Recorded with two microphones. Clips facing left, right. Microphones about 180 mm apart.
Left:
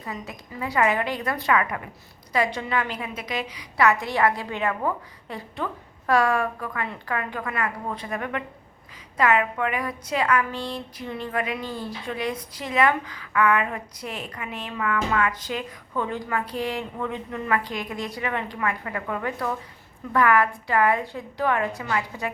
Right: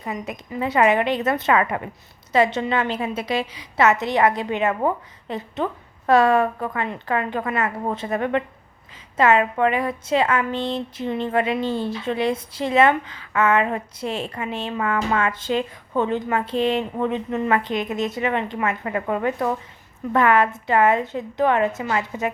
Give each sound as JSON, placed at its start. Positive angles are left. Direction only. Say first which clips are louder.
{"t": 0.0, "sound": "a woman's voice", "louder": "right 5 dB", "side_deg": -20}